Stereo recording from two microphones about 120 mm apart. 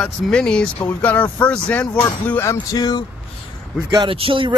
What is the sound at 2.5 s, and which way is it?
Vehicle, 35° left (ahead or behind).